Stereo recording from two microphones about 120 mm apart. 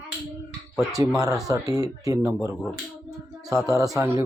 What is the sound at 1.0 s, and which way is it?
Speech, 25° right (ahead or behind).